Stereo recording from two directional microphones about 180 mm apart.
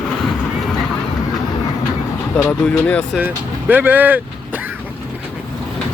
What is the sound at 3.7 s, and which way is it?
Speech, 10° right (ahead or behind).